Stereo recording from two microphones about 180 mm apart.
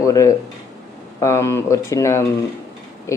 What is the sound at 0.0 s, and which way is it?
Speech, 20° left (ahead or behind).